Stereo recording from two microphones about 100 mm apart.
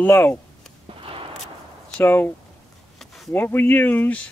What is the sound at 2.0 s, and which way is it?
Speech, 25° left (ahead or behind).